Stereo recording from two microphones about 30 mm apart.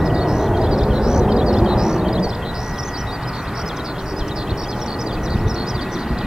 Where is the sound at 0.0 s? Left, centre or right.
Right.